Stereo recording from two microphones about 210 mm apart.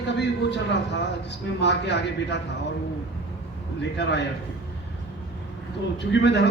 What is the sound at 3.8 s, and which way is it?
Speech, 55° left (ahead or behind).